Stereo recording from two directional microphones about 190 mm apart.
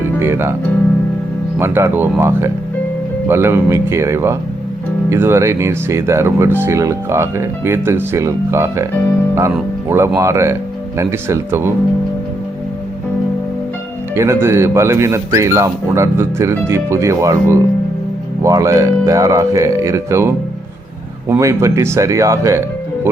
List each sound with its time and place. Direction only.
0.2 s speech: 15° right (ahead or behind)
1.5 s speech: 15° right (ahead or behind)
9.9 s speech: 15° right (ahead or behind)
14.2 s speech: 15° right (ahead or behind)